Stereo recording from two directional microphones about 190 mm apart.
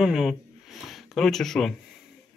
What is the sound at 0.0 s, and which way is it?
Speech, centre (ahead or behind).